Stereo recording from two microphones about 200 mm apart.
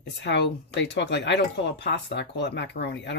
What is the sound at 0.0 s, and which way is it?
Speech, 60° left (ahead or behind).